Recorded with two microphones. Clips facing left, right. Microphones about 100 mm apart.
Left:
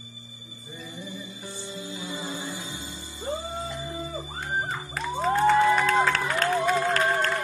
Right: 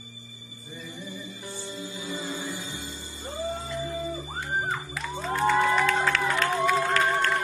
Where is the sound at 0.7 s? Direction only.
20° left (ahead or behind).